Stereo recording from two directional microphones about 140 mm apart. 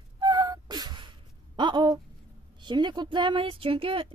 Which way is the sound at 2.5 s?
35° right (ahead or behind).